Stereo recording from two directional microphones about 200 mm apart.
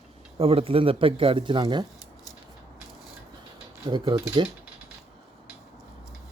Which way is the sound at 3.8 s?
20° right (ahead or behind).